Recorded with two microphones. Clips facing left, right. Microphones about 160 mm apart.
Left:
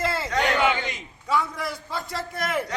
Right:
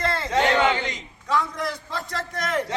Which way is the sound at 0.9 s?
5° left (ahead or behind).